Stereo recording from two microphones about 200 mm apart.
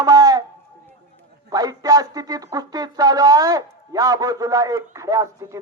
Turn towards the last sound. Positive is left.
turn(degrees=-15)  # may be behind; listen again after turning